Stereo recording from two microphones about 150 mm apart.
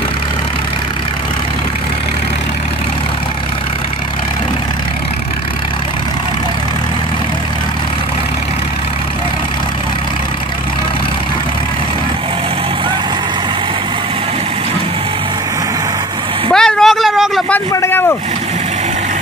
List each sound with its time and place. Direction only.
16.5 s vehicle: 5° left (ahead or behind)
17.7 s boat: 15° left (ahead or behind)